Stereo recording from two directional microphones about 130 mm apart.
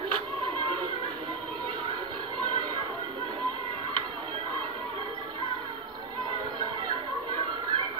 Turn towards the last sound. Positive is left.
turn(degrees=-40)  # may be behind; listen again after turning